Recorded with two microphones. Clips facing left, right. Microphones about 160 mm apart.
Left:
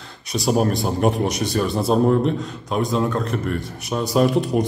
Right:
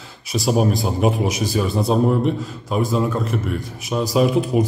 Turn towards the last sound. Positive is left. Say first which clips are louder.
# right 1 dB
turn(degrees=0)  # may be behind; listen again after turning